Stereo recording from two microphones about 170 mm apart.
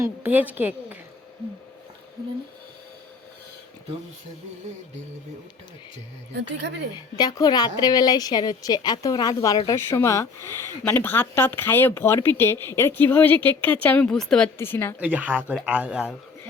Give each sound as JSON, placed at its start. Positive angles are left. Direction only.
{"t": 0.0, "sound": "a woman's voice", "side_deg": -10}
{"t": 6.3, "sound": "speech", "side_deg": -90}
{"t": 6.9, "sound": "a woman's voice", "side_deg": 25}
{"t": 14.9, "sound": "a woman's voice", "side_deg": -10}